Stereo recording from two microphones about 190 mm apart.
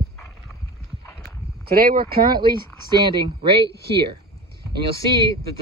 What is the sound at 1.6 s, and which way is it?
Speech, 50° right (ahead or behind).